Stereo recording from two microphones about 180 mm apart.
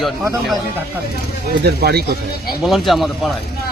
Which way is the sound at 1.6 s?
60° right (ahead or behind).